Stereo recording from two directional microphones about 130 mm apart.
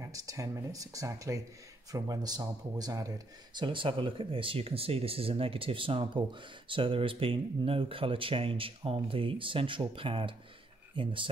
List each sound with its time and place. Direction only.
0.0 s speech: 25° right (ahead or behind)
3.5 s speech: 40° right (ahead or behind)